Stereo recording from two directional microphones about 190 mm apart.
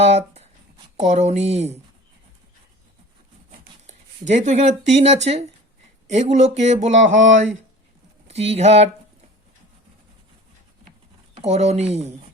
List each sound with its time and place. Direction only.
0.0 s speech: 35° right (ahead or behind)
3.8 s speech: 40° right (ahead or behind)
11.3 s speech: 35° right (ahead or behind)